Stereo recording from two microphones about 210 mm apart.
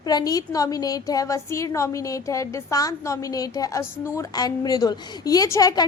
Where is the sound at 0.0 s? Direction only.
20° left (ahead or behind).